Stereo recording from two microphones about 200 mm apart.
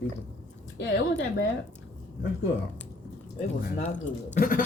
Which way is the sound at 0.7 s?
60° left (ahead or behind).